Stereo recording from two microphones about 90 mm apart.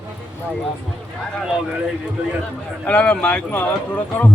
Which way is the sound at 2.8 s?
15° left (ahead or behind).